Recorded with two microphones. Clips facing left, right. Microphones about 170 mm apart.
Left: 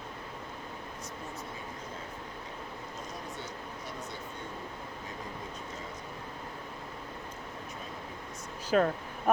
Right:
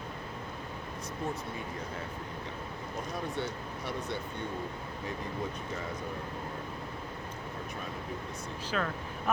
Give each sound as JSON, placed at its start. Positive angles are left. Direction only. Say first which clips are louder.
{"t": 3.4, "sound": "speech", "louder": "right 5 dB", "side_deg": -70}
{"t": 8.7, "sound": "speech", "louder": "left 8 dB", "side_deg": 40}